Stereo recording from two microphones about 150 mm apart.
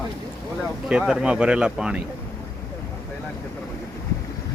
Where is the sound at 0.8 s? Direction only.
5° right (ahead or behind).